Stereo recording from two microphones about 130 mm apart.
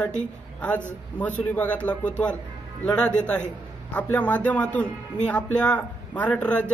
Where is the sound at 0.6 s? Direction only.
10° left (ahead or behind).